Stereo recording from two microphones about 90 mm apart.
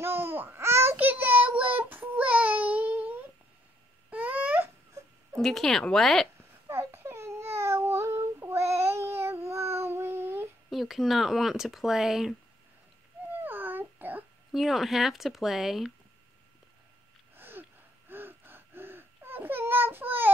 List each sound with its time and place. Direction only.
0.0 s child singing: 25° right (ahead or behind)
4.1 s babbling: 15° right (ahead or behind)
5.4 s speech: 5° left (ahead or behind)
6.7 s child singing: 25° right (ahead or behind)
10.7 s speech: centre (ahead or behind)
13.4 s a sound: 20° right (ahead or behind)
14.5 s speech: centre (ahead or behind)
17.4 s gasp: 20° right (ahead or behind)